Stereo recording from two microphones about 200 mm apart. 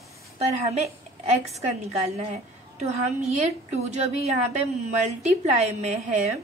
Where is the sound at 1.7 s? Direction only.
30° right (ahead or behind).